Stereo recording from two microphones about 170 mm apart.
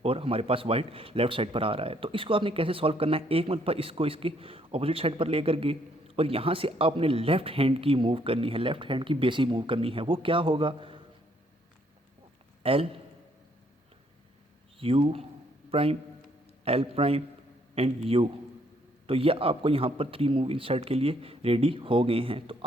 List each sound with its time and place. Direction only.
0.0 s speech: 35° right (ahead or behind)
12.6 s speech: 35° right (ahead or behind)
14.8 s a man's voice: 35° right (ahead or behind)